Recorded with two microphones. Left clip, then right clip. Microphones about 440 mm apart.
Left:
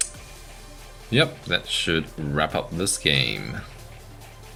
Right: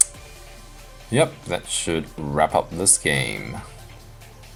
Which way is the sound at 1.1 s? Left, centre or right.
Right.